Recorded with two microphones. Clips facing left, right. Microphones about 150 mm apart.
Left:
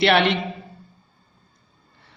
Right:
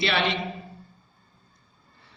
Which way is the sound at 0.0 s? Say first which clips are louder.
Left 8 dB; 65° left (ahead or behind).